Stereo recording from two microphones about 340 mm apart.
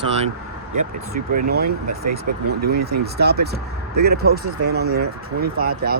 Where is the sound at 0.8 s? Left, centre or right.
Right.